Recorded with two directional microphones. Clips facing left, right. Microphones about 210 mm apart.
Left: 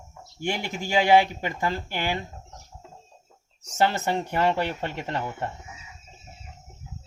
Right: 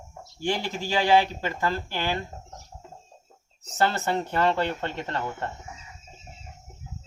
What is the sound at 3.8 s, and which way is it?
Speech, 15° left (ahead or behind).